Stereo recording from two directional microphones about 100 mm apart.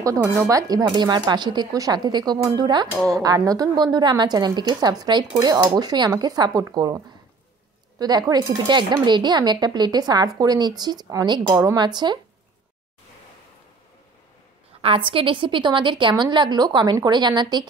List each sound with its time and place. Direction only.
0.0 s a woman's voice: 35° right (ahead or behind)
8.0 s a woman's voice: 40° right (ahead or behind)
14.8 s a woman's voice: 65° right (ahead or behind); by 17.6 s 45° right (ahead or behind)